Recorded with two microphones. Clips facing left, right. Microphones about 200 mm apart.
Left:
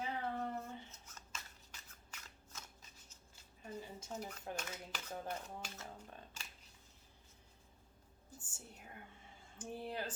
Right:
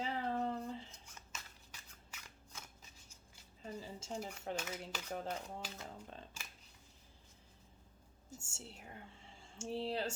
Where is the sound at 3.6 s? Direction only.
25° right (ahead or behind).